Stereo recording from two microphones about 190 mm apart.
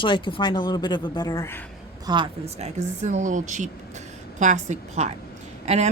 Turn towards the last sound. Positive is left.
turn(degrees=-35)  # may be behind; listen again after turning